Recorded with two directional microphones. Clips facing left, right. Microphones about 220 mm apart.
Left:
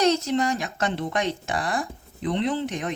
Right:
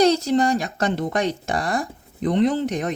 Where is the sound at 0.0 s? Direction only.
35° right (ahead or behind).